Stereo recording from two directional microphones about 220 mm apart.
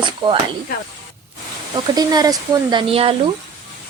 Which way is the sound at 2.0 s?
20° right (ahead or behind).